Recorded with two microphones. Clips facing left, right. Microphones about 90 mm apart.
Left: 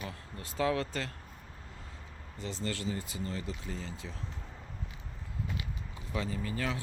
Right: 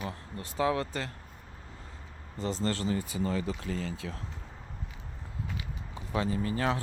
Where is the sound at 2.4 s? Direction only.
40° right (ahead or behind).